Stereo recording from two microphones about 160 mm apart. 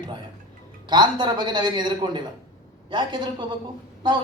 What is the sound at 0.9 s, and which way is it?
Speech, 30° right (ahead or behind).